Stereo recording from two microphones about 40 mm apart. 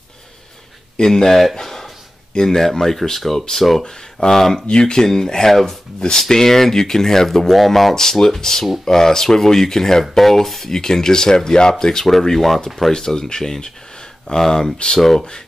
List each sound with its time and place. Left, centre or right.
0.9 s speech: centre
7.9 s speech: centre
15.0 s speech: centre